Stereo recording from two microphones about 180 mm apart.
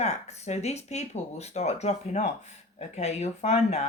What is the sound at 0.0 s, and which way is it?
Speech, 40° left (ahead or behind).